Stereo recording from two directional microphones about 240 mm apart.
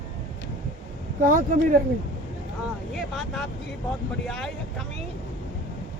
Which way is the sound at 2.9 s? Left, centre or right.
Centre.